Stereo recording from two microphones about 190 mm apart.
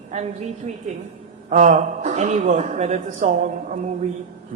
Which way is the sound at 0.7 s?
35° right (ahead or behind).